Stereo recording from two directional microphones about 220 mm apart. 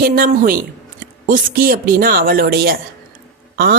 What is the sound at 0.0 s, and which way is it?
A woman's voice, 40° right (ahead or behind).